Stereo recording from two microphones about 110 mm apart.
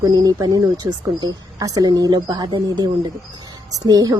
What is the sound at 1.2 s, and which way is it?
Speech, 35° right (ahead or behind).